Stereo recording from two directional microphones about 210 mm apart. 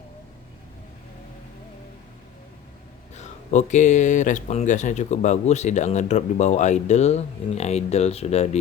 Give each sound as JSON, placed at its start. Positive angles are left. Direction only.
{"t": 3.2, "sound": "speech", "side_deg": 35}